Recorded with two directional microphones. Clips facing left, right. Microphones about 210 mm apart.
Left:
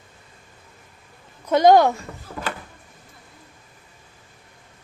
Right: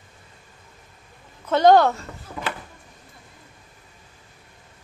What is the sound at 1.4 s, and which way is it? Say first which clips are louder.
Speech: left 1 dB; 10° left (ahead or behind).